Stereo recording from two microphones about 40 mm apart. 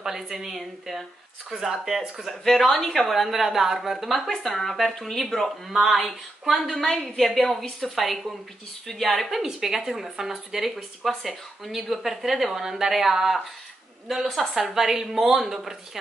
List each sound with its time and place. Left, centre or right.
0.0 s a woman's voice: centre
2.4 s a woman's voice: centre
5.7 s a woman's voice: centre
7.9 s a woman's voice: centre
9.4 s a woman's voice: centre
14.3 s a woman's voice: centre
14.6 s a woman's voice: centre